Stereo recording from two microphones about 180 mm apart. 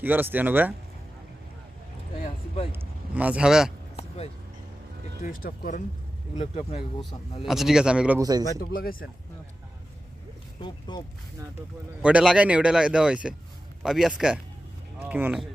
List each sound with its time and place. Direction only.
0.0 s speech: 10° right (ahead or behind)
2.7 s speech: 10° right (ahead or behind)
5.2 s speech: 50° left (ahead or behind)
6.3 s speech: 40° left (ahead or behind)
7.4 s speech: centre (ahead or behind)
8.2 s speech: 20° right (ahead or behind)
8.7 s speech: 55° left (ahead or behind)
10.6 s speech: 25° left (ahead or behind)
12.0 s speech: 5° right (ahead or behind)